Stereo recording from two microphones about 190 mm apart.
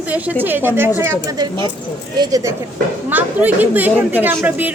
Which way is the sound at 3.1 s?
10° right (ahead or behind).